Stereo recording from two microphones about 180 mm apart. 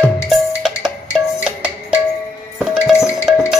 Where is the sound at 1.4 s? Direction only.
5° right (ahead or behind).